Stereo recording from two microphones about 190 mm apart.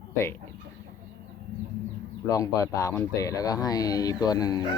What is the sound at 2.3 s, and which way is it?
Speech, 15° left (ahead or behind).